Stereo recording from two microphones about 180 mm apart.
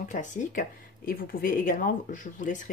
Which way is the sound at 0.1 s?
45° left (ahead or behind).